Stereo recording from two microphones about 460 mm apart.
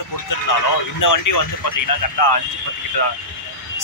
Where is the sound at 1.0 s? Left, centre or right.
Left.